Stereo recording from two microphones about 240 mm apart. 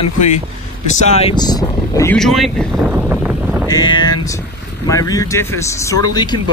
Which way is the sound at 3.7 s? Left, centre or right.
Centre.